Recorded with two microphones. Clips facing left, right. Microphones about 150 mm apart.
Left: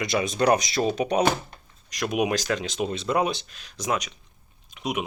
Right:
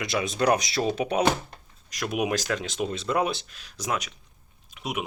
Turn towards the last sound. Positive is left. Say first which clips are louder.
# left 4 dB
turn(degrees=0)  # may be behind; listen again after turning